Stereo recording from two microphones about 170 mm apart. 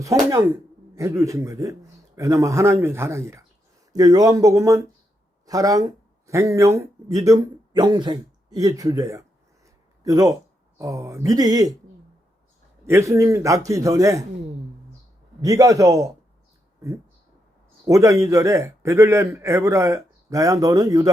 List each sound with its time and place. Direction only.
0.0 s a man's voice: 20° right (ahead or behind)
9.6 s a sound: 20° right (ahead or behind)
10.8 s speech: 15° right (ahead or behind)
12.8 s speech: 15° right (ahead or behind)
15.4 s speech: 20° right (ahead or behind)
17.8 s a man's voice: 20° right (ahead or behind)